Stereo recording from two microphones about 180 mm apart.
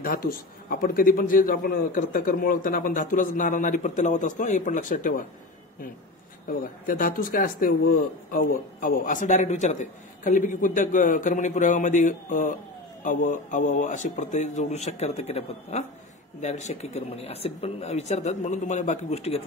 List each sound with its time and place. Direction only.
0.0 s speech: 55° left (ahead or behind)
6.5 s speech: 50° left (ahead or behind); by 19.4 s 35° left (ahead or behind)